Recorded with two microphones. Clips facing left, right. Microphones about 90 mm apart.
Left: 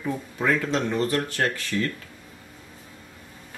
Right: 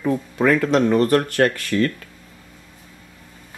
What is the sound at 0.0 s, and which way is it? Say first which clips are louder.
Speech: right 7 dB; 70° right (ahead or behind).